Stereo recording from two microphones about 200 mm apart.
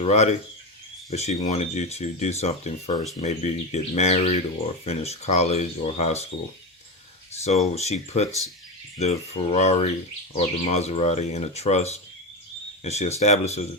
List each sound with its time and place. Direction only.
0.0 s speech: 35° left (ahead or behind)
7.4 s speech: 35° left (ahead or behind)